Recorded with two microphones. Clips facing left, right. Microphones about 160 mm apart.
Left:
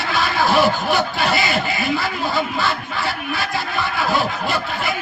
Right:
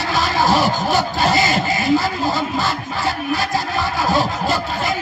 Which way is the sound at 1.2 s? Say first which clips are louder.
Right 3 dB; 40° right (ahead or behind).